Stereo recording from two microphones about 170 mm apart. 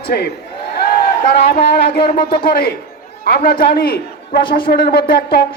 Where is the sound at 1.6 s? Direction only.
70° left (ahead or behind).